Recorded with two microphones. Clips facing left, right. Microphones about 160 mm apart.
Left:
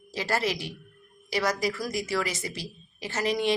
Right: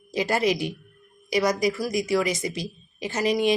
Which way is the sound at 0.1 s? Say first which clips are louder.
Right 5 dB; 15° right (ahead or behind).